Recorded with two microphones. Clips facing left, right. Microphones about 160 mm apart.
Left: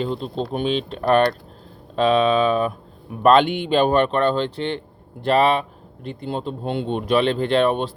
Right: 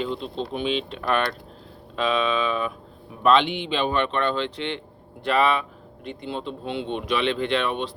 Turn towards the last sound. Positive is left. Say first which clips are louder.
# left 6 dB
turn(degrees=40)  # may be behind; listen again after turning